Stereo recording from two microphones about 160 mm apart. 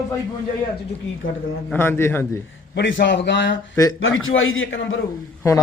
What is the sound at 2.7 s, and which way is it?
Speech, 90° left.